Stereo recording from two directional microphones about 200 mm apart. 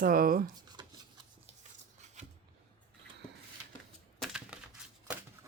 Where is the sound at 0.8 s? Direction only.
20° right (ahead or behind).